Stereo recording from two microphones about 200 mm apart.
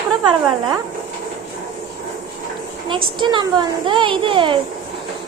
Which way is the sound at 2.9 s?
25° right (ahead or behind).